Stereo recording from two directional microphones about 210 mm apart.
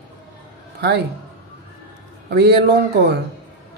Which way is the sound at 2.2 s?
50° right (ahead or behind).